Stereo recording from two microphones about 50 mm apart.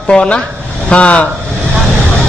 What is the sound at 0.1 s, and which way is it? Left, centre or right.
A man's voice, left.